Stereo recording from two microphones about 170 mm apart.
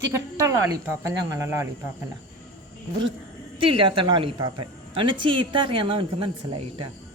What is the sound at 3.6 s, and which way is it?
A woman's voice, 30° right (ahead or behind).